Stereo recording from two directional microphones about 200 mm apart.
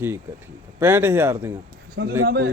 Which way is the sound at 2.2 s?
55° right (ahead or behind).